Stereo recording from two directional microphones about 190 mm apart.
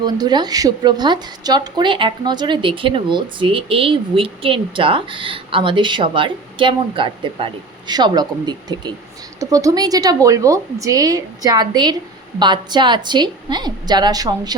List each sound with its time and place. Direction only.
0.0 s a woman's voice: 20° right (ahead or behind)